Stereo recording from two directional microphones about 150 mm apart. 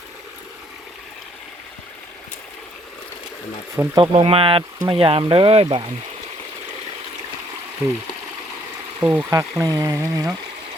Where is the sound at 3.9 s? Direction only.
35° right (ahead or behind).